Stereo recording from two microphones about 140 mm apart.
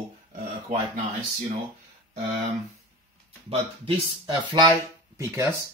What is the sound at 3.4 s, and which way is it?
Speech, 40° right (ahead or behind).